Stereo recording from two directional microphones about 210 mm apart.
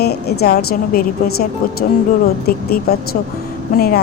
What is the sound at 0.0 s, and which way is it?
A woman's voice, 50° left (ahead or behind).